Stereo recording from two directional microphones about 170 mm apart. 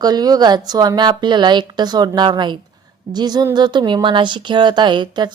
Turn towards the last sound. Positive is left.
turn(degrees=-25)  # may be behind; listen again after turning